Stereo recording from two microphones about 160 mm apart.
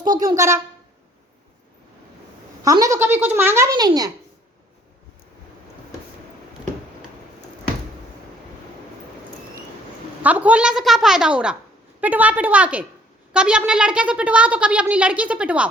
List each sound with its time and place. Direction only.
0.3 s a woman's voice: 20° right (ahead or behind)
2.6 s a woman's voice: 20° right (ahead or behind)
10.2 s a woman's voice: 10° right (ahead or behind)